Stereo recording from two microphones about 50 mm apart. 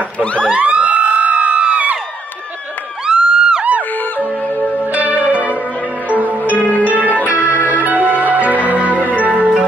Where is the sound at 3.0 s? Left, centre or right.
Centre.